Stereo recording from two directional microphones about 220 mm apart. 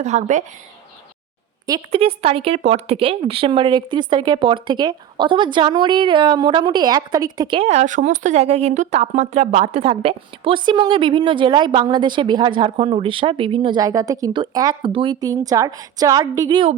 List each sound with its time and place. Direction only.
0.0 s speech: 30° right (ahead or behind)
1.6 s speech: 20° right (ahead or behind)